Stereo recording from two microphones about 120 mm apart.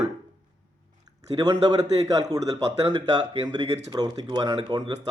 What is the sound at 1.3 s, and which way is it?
Speech, 30° right (ahead or behind).